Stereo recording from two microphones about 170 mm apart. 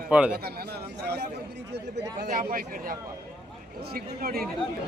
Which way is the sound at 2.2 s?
50° right (ahead or behind).